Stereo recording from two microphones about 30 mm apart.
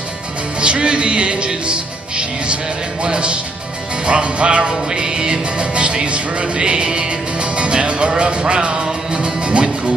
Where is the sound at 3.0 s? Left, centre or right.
Right.